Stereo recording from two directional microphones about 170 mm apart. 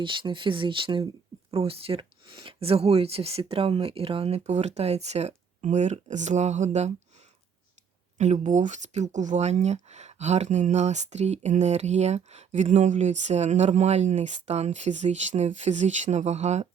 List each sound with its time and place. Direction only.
0.0 s speech: 30° right (ahead or behind)
8.2 s speech: 45° right (ahead or behind)